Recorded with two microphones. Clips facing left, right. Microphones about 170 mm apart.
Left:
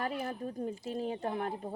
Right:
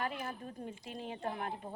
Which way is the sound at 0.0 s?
35° left (ahead or behind).